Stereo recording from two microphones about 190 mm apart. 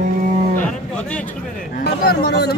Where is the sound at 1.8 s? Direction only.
60° left (ahead or behind).